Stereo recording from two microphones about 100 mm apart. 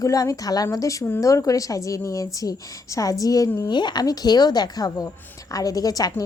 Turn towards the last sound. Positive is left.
turn(degrees=40)  # may be behind; listen again after turning